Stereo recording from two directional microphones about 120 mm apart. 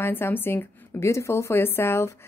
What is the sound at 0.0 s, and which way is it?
A woman's voice, 15° left (ahead or behind).